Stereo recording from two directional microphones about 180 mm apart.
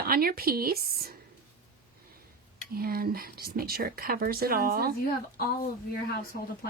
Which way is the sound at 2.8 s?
55° right (ahead or behind).